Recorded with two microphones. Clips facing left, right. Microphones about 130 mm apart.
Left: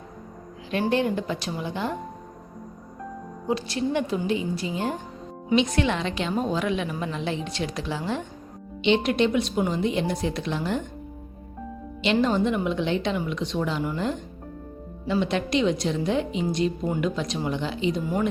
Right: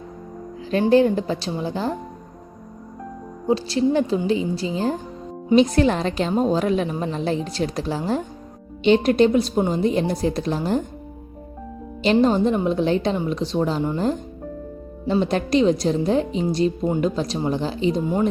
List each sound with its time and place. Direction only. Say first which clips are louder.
0.7 s a woman's voice: right 7 dB; 35° right (ahead or behind)
3.4 s a woman's voice: right 7 dB; 30° right (ahead or behind)
12.2 s a woman's voice: right 3 dB; 35° right (ahead or behind)
18.0 s speech: right 4 dB; 25° right (ahead or behind)